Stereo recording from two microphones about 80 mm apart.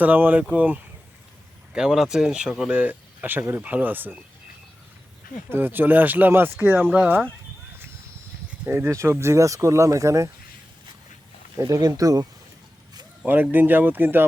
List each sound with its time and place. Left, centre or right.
0.0 s speech: right
5.5 s speech: right
8.7 s speech: right
11.5 s speech: right
13.2 s speech: right